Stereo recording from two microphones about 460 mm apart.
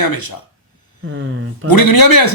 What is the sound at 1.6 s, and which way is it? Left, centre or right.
Speech, left.